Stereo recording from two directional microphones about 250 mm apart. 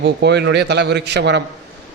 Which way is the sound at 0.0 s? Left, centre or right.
Right.